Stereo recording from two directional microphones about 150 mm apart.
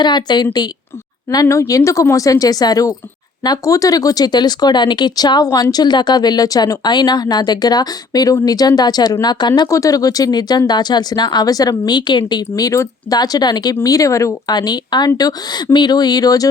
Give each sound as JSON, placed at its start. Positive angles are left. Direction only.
{"t": 0.0, "sound": "speech", "side_deg": 30}